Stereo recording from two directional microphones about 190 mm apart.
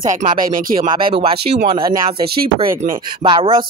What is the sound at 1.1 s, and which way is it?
Speech, 30° right (ahead or behind).